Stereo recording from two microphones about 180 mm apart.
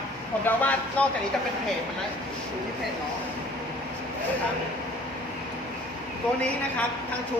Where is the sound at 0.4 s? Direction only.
10° left (ahead or behind).